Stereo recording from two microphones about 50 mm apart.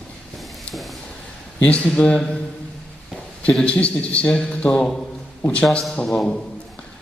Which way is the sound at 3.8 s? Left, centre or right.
Left.